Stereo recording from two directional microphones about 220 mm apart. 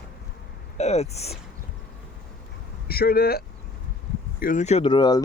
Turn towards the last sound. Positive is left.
turn(degrees=20)  # may be behind; listen again after turning